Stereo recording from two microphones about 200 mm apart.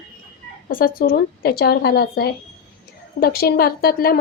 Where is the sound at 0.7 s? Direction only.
45° left (ahead or behind).